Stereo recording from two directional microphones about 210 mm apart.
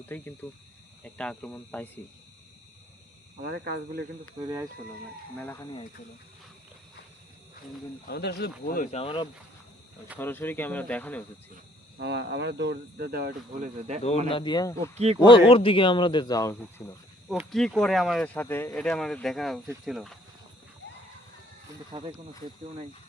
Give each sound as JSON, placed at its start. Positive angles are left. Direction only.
{"t": 0.0, "sound": "speech", "side_deg": 10}
{"t": 3.4, "sound": "speech", "side_deg": -50}
{"t": 4.4, "sound": "speech", "side_deg": -20}
{"t": 5.4, "sound": "speech", "side_deg": 10}
{"t": 8.0, "sound": "speech", "side_deg": 50}
{"t": 8.6, "sound": "speech", "side_deg": 35}
{"t": 10.2, "sound": "speech", "side_deg": 10}
{"t": 11.9, "sound": "speech", "side_deg": -55}
{"t": 13.9, "sound": "speech", "side_deg": -30}
{"t": 14.3, "sound": "speech", "side_deg": 20}
{"t": 14.9, "sound": "speech", "side_deg": -30}
{"t": 15.2, "sound": "speech", "side_deg": 25}
{"t": 17.2, "sound": "speech", "side_deg": 0}